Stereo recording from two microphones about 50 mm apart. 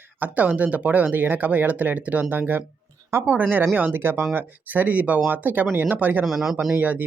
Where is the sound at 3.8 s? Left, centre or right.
Right.